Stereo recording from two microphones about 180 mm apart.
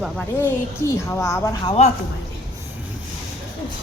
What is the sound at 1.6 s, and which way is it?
Speech, 35° left (ahead or behind).